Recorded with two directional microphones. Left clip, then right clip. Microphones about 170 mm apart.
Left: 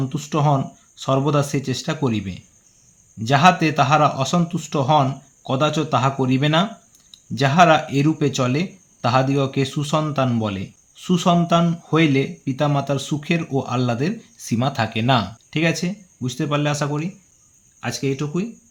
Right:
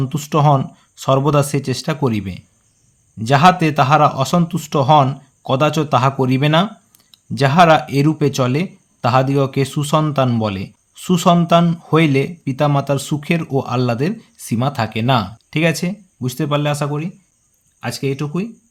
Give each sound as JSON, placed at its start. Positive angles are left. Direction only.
{"t": 0.0, "sound": "a man's voice", "side_deg": -35}